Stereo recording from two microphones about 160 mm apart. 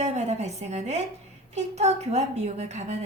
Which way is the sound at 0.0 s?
45° right (ahead or behind).